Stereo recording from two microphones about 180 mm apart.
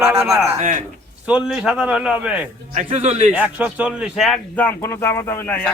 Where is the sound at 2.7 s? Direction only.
35° right (ahead or behind).